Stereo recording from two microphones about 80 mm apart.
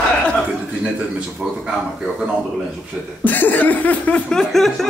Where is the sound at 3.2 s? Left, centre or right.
Left; by 4.9 s centre.